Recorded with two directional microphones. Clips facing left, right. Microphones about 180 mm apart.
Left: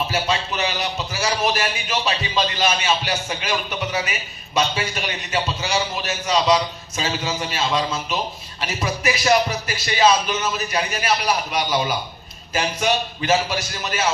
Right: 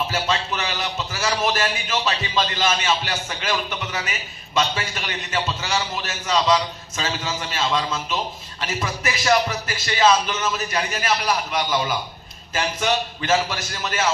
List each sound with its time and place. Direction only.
0.1 s a man's voice: 15° left (ahead or behind)